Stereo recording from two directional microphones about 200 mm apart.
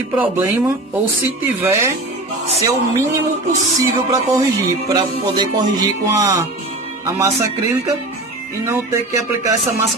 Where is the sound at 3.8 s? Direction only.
15° right (ahead or behind).